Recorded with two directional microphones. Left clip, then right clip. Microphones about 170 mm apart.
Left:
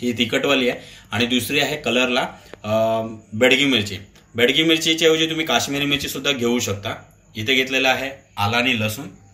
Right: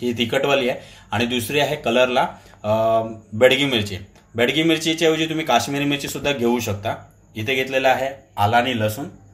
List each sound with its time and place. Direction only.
0.0 s a man's voice: 50° right (ahead or behind)